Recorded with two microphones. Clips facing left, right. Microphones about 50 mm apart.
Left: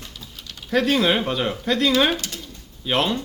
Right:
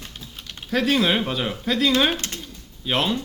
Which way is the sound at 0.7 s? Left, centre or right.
Centre.